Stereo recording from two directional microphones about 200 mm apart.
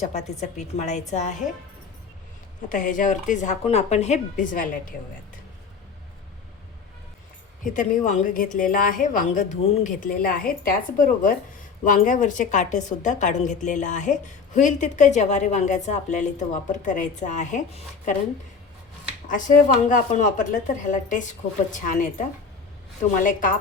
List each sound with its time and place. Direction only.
0.0 s a woman's voice: 35° left (ahead or behind)
2.6 s a woman's voice: 40° left (ahead or behind)
7.6 s a woman's voice: 40° left (ahead or behind)
19.3 s a woman's voice: 40° left (ahead or behind)
23.1 s a woman's voice: 40° left (ahead or behind)